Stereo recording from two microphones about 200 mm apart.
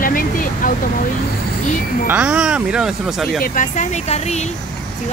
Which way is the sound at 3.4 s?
40° left (ahead or behind).